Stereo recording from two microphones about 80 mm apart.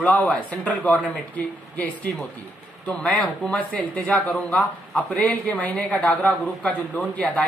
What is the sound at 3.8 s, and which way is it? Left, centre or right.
Speech, centre.